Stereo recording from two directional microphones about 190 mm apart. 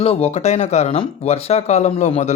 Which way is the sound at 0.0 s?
30° left (ahead or behind).